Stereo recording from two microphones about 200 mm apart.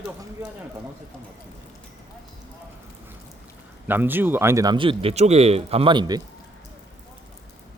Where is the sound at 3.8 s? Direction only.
10° right (ahead or behind).